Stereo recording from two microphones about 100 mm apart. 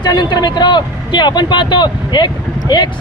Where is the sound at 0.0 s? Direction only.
45° left (ahead or behind).